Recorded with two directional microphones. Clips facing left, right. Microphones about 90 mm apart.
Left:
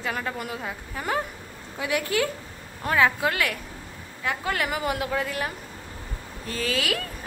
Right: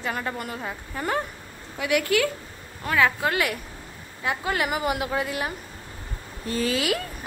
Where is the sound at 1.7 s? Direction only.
30° left (ahead or behind).